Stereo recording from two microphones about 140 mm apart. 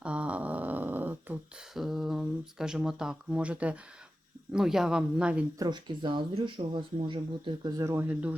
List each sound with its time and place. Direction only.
0.0 s a sound: 10° right (ahead or behind)
1.7 s speech: centre (ahead or behind)
5.5 s speech: 30° right (ahead or behind)
7.8 s speech: 20° right (ahead or behind)